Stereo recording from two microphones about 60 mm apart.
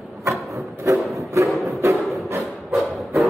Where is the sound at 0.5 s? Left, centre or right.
Right.